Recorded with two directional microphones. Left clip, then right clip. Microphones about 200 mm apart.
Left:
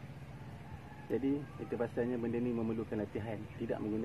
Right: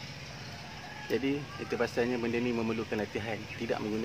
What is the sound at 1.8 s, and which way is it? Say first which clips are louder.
Speech: right 6 dB; 15° right (ahead or behind).